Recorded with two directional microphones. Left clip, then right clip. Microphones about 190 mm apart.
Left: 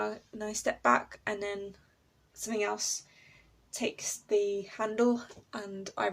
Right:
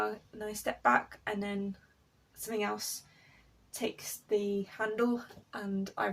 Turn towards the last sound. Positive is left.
turn(degrees=45)  # may be behind; listen again after turning